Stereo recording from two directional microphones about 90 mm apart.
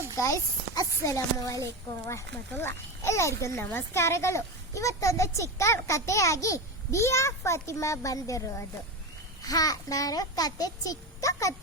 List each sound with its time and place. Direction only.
0.7 s a child's voice: 40° left (ahead or behind)